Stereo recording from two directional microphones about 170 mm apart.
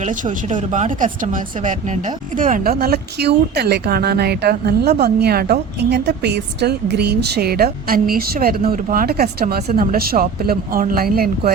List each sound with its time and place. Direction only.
0.0 s speech: 50° right (ahead or behind)